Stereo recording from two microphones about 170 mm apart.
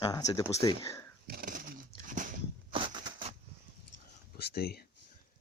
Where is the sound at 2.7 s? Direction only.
30° right (ahead or behind).